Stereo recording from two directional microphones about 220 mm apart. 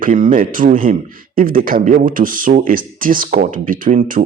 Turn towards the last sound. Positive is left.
turn(degrees=-40)  # may be behind; listen again after turning